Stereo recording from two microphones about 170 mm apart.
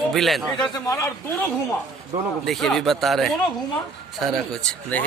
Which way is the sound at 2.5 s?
Centre (ahead or behind).